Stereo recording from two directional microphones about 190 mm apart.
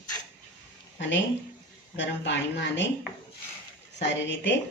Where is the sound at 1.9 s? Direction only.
70° left (ahead or behind).